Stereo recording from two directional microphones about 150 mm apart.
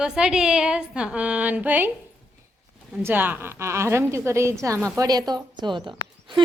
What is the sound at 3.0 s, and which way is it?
A woman's voice, 15° right (ahead or behind).